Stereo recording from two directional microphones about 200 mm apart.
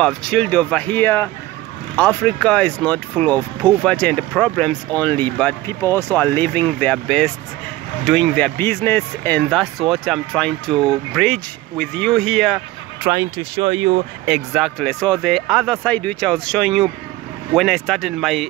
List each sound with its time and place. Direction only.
0.0 s speech: 5° left (ahead or behind)
13.0 s speech: 15° right (ahead or behind)
14.2 s speech: 5° right (ahead or behind)